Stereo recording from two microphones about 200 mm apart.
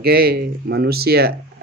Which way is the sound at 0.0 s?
50° right (ahead or behind).